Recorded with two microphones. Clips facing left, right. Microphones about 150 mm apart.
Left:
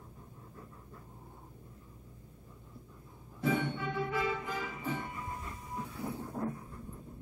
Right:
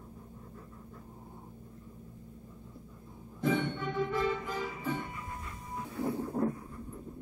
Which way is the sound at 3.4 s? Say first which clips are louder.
Right 2 dB; 10° left (ahead or behind).